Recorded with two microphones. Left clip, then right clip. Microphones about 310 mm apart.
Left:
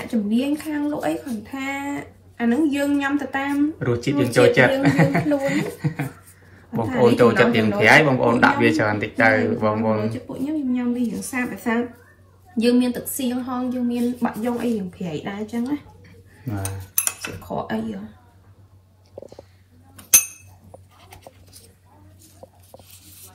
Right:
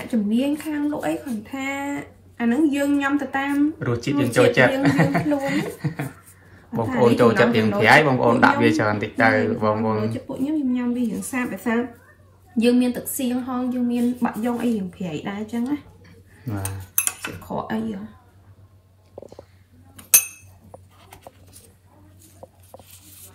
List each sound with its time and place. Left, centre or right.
0.1 s speech: centre
12.8 s speech: centre
16.5 s cutlery: centre
17.2 s speech: centre
22.4 s a sound: left